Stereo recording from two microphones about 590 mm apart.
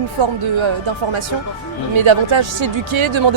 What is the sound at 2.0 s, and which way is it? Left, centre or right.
Speech, right.